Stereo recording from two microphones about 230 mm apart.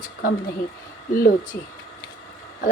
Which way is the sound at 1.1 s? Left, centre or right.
Left.